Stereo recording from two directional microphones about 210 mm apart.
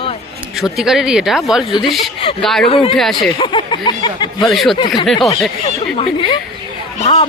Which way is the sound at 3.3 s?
20° left (ahead or behind).